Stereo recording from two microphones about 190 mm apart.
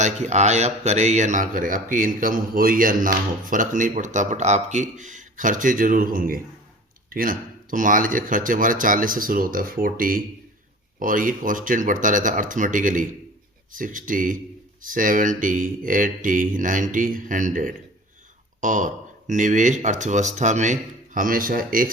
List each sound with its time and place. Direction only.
0.0 s a man's voice: 35° right (ahead or behind)